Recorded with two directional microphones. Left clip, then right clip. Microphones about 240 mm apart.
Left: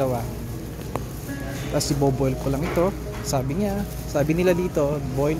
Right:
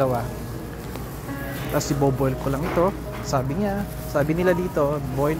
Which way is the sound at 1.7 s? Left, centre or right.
Centre.